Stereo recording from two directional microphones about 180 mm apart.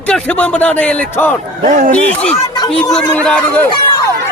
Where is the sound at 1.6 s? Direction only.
45° right (ahead or behind).